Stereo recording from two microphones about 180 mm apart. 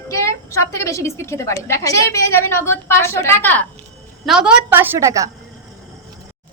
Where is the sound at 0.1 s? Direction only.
15° left (ahead or behind).